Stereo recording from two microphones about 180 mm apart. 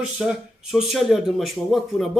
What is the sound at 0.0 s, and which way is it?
Speech, 5° right (ahead or behind).